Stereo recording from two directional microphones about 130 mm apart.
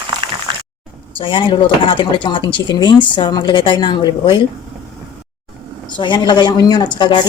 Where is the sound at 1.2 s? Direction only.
40° left (ahead or behind).